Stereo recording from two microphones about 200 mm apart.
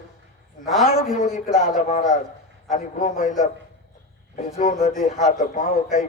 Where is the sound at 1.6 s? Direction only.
40° left (ahead or behind).